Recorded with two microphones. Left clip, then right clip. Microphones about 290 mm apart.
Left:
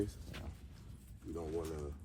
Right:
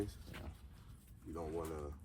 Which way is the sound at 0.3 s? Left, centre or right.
Centre.